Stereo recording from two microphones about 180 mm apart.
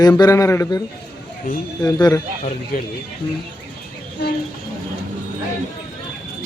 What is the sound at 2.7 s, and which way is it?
Speech, 50° left (ahead or behind).